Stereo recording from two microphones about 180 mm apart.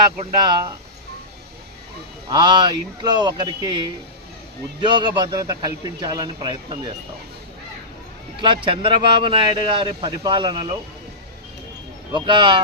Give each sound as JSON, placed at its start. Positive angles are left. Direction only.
{"t": 2.3, "sound": "speech", "side_deg": -25}
{"t": 8.4, "sound": "speech", "side_deg": -25}
{"t": 12.1, "sound": "speech", "side_deg": -25}